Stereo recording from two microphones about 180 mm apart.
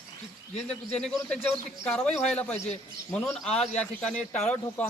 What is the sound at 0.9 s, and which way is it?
A man's voice, 5° left (ahead or behind).